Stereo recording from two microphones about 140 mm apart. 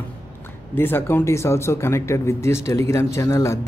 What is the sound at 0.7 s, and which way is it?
Speech, 15° left (ahead or behind).